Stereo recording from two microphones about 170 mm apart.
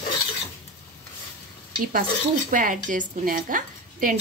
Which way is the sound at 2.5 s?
50° right (ahead or behind).